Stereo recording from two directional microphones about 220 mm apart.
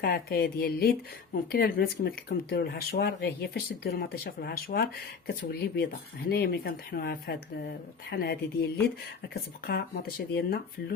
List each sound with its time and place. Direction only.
0.0 s speech: 45° left (ahead or behind)